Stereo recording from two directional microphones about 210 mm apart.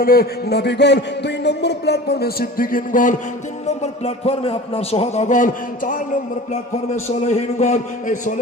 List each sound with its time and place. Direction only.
0.0 s a man's voice: 45° left (ahead or behind)
4.0 s a man's voice: 30° left (ahead or behind)
7.3 s a man's voice: 30° left (ahead or behind)